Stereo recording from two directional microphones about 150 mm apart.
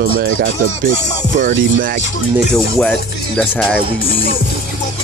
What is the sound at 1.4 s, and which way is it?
Music, 65° right (ahead or behind).